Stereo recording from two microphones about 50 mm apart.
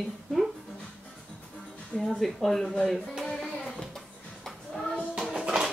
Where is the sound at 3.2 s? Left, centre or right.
Centre.